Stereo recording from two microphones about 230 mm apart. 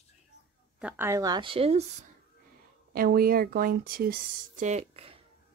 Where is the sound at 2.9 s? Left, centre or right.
Right.